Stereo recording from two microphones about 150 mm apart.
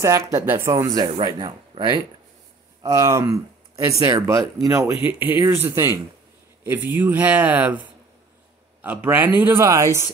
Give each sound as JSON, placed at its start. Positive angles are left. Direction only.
{"t": 0.0, "sound": "speech", "side_deg": -20}
{"t": 2.8, "sound": "speech", "side_deg": -20}